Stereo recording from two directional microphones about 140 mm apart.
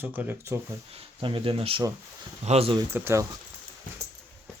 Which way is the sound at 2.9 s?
15° right (ahead or behind).